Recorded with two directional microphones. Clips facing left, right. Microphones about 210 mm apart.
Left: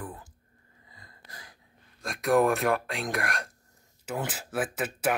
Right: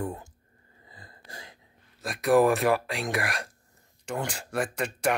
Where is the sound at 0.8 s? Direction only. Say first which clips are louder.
Right 5 dB; 30° right (ahead or behind).